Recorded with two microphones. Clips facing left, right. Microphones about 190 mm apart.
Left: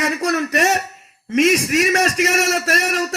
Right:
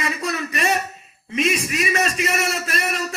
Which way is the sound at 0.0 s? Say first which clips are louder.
Left 6 dB; 75° left (ahead or behind).